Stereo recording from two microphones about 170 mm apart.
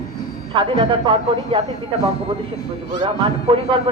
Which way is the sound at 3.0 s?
30° right (ahead or behind).